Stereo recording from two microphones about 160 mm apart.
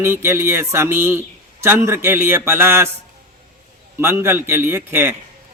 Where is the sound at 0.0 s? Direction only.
15° right (ahead or behind).